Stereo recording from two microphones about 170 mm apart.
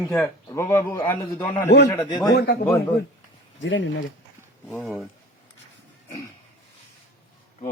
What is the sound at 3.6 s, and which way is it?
Speech, 90° left.